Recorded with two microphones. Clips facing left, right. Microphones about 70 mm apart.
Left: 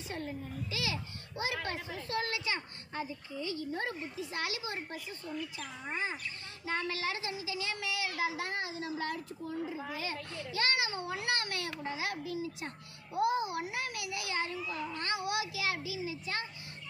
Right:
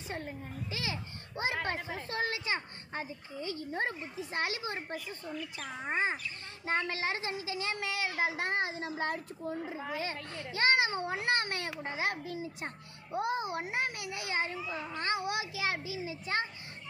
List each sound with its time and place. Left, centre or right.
0.1 s a child's voice: right
5.6 s a child's voice: right